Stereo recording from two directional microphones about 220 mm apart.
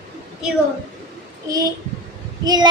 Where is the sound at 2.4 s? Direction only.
15° right (ahead or behind).